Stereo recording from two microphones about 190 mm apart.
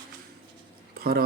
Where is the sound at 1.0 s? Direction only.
50° right (ahead or behind).